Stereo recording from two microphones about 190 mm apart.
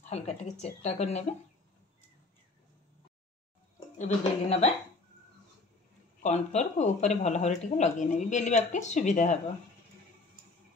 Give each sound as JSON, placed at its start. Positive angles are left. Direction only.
{"t": 0.1, "sound": "speech", "side_deg": 35}
{"t": 4.0, "sound": "speech", "side_deg": 35}
{"t": 6.2, "sound": "speech", "side_deg": 35}